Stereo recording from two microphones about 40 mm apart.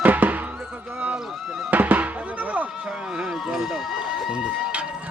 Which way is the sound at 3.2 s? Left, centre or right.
Centre.